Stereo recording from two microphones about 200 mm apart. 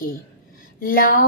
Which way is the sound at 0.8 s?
45° left (ahead or behind).